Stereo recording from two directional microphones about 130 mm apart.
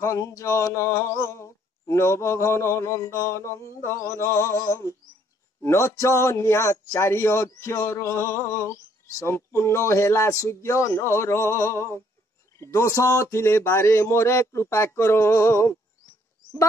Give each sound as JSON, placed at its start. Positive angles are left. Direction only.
{"t": 0.0, "sound": "a man's voice", "side_deg": 25}